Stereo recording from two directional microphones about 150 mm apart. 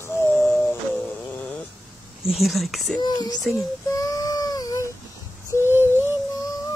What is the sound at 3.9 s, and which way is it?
Child singing, 25° left (ahead or behind).